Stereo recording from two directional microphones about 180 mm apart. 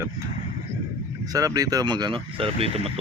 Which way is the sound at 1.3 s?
20° right (ahead or behind).